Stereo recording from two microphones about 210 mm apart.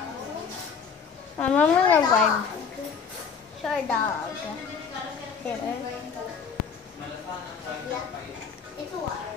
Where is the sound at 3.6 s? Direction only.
5° left (ahead or behind).